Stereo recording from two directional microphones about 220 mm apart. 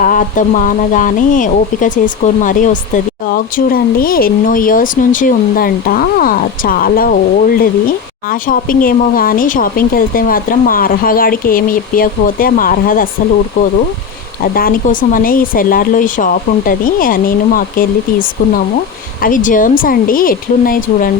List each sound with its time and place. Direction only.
0.0 s speech: 35° left (ahead or behind)
14.4 s speech: 40° left (ahead or behind)